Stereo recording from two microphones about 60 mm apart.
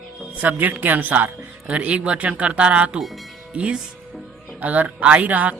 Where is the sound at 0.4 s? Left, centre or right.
Right.